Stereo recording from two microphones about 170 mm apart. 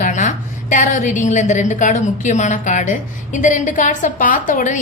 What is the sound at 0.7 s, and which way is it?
A woman's voice, 50° left (ahead or behind).